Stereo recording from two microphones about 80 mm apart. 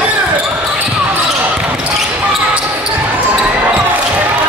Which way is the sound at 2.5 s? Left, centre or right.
Centre.